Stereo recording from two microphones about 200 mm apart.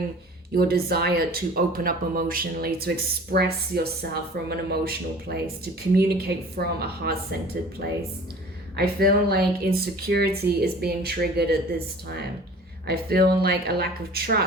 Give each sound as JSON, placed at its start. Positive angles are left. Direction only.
{"t": 0.5, "sound": "speech", "side_deg": -50}
{"t": 12.9, "sound": "speech", "side_deg": -50}